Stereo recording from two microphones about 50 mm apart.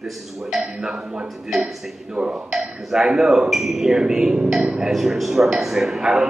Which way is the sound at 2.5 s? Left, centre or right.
Centre.